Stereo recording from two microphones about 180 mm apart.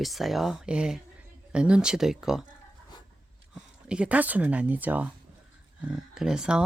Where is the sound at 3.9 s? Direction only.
5° right (ahead or behind).